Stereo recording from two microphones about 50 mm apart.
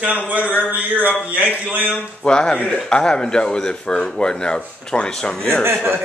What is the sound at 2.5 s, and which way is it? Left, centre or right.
Speech, left.